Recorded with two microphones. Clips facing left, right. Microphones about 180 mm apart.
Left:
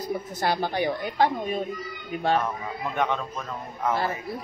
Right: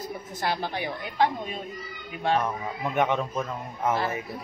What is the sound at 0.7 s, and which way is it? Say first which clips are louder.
Speech: left 3 dB; 40° left (ahead or behind).